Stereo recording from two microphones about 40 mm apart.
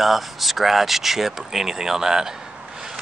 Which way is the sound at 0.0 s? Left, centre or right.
Centre.